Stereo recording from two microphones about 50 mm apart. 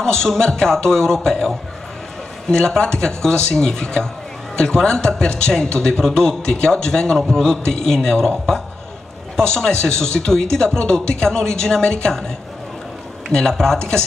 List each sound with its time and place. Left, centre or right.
0.0 s speech: centre
2.5 s speech: centre
9.4 s speech: centre
13.3 s speech: centre